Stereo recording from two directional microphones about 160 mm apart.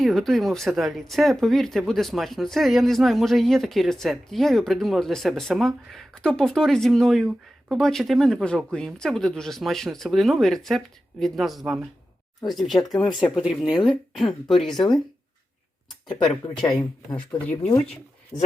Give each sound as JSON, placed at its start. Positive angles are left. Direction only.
{"t": 0.0, "sound": "speech", "side_deg": 0}
{"t": 13.0, "sound": "speech", "side_deg": 30}
{"t": 13.3, "sound": "speech", "side_deg": -5}
{"t": 17.4, "sound": "speech", "side_deg": 10}